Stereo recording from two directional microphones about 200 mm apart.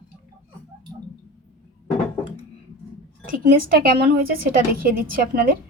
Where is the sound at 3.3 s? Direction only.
45° right (ahead or behind).